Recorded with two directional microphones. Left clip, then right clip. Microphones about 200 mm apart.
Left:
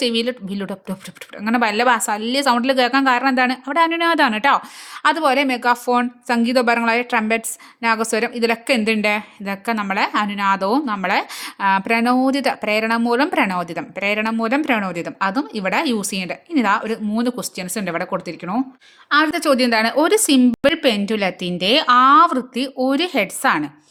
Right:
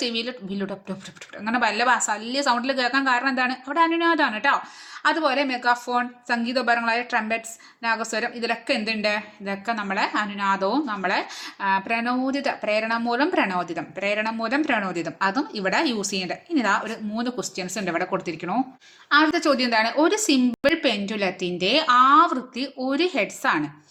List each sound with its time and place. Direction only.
0.0 s a woman's voice: 35° left (ahead or behind)